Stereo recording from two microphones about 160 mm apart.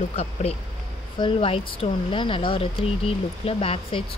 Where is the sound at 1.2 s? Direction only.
35° left (ahead or behind).